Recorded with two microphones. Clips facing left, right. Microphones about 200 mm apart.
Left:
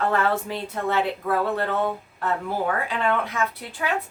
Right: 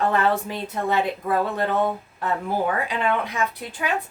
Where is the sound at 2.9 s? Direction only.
15° right (ahead or behind).